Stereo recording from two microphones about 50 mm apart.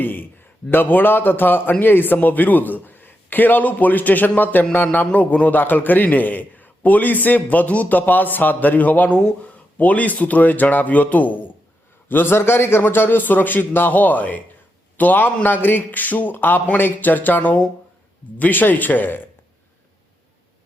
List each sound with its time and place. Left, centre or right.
0.0 s a man's voice: left
9.0 s speech: left
9.7 s a man's voice: left
12.0 s a man's voice: left